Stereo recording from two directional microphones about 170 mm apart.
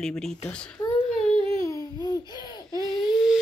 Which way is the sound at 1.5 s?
15° left (ahead or behind).